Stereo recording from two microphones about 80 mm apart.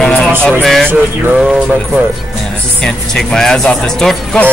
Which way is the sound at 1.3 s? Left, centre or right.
Centre.